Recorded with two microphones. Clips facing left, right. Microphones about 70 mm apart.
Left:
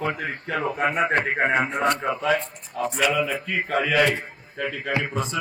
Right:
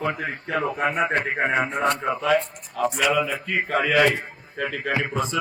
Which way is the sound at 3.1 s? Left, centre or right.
Centre.